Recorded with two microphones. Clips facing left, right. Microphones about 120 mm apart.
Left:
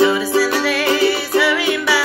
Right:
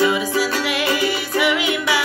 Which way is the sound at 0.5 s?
15° right (ahead or behind).